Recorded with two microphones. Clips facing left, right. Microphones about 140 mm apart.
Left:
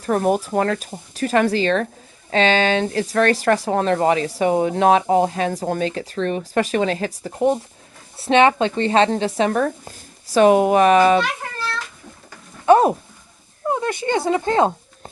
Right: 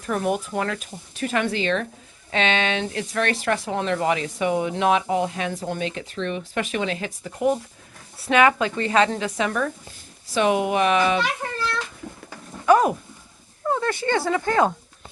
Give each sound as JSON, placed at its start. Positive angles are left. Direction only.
{"t": 0.0, "sound": "speech", "side_deg": 40}
{"t": 12.6, "sound": "a sound", "side_deg": 30}
{"t": 13.7, "sound": "speech", "side_deg": 20}